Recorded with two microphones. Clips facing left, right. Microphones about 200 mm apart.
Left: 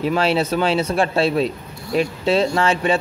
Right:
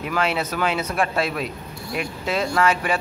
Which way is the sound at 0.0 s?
30° left (ahead or behind).